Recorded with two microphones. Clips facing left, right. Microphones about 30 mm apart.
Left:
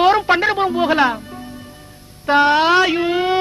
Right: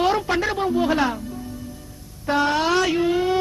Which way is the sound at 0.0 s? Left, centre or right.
Left.